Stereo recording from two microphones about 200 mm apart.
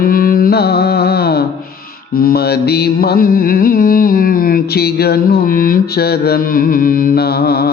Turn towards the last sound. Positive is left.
turn(degrees=50)  # may be behind; listen again after turning